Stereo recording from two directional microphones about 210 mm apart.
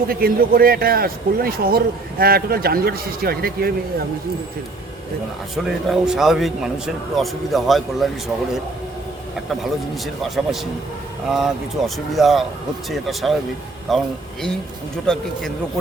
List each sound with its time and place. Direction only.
0.1 s a man's voice: 45° right (ahead or behind)
5.5 s speech: centre (ahead or behind)
9.3 s speech: centre (ahead or behind)